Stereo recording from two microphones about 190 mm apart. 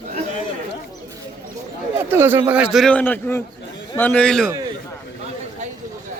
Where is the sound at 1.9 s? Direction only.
10° right (ahead or behind); by 4.5 s 5° left (ahead or behind).